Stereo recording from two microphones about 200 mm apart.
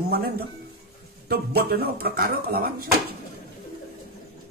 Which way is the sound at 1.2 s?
50° right (ahead or behind).